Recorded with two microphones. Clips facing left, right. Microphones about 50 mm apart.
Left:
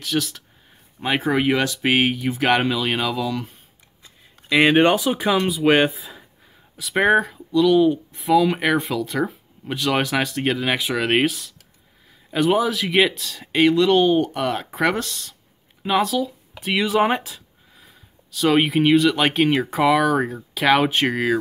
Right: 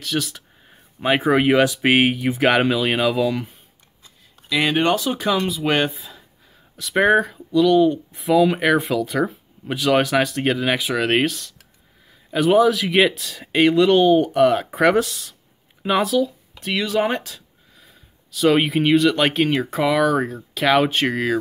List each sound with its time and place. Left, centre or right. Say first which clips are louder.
0.0 s speech: left 1 dB; centre
3.2 s speech: right 4 dB; right
4.5 s speech: left 4 dB; left
4.9 s speech: left 1 dB; centre
16.5 s speech: left 2 dB; centre
17.3 s speech: even; centre